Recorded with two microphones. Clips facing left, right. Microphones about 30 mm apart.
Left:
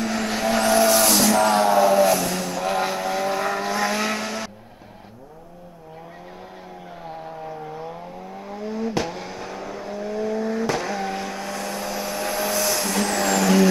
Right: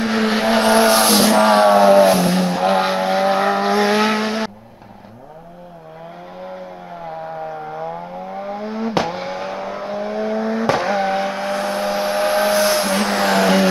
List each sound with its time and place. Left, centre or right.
0.0 s vehicle: right
7.2 s vehicle: right